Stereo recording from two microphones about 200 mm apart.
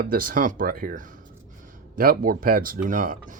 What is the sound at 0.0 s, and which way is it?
Speech, 45° right (ahead or behind).